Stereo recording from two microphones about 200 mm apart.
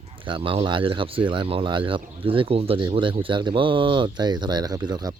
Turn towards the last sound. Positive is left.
turn(degrees=-20)  # may be behind; listen again after turning